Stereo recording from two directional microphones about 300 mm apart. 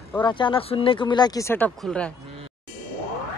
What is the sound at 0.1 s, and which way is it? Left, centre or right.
Speech, centre.